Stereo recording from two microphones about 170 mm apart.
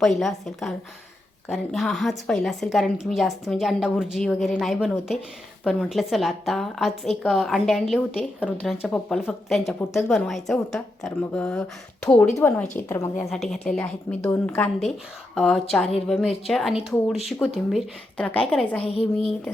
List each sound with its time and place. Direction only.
0.0 s a woman's voice: centre (ahead or behind)
13.3 s a woman's voice: centre (ahead or behind)
18.8 s speech: 35° left (ahead or behind)